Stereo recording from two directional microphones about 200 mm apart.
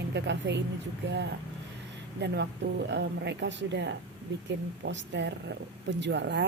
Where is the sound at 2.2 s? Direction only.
60° right (ahead or behind).